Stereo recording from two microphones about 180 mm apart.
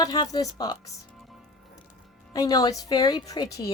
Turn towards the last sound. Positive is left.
turn(degrees=20)  # may be behind; listen again after turning